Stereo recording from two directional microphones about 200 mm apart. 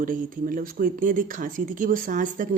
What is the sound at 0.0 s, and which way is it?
A woman's voice, 45° right (ahead or behind).